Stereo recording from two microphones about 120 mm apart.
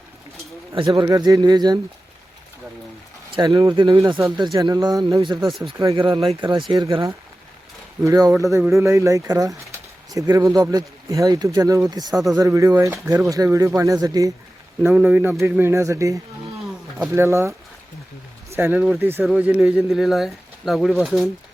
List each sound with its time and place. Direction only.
0.9 s speech: 30° right (ahead or behind)
3.3 s speech: 35° right (ahead or behind)
5.2 s speech: 40° right (ahead or behind)
6.0 s speech: 50° right (ahead or behind)
8.0 s speech: 30° right (ahead or behind)
14.8 s speech: 10° right (ahead or behind)
18.7 s speech: 10° right (ahead or behind)
19.2 s speech: 5° right (ahead or behind)